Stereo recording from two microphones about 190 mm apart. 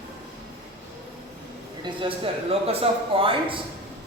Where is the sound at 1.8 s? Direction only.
25° right (ahead or behind).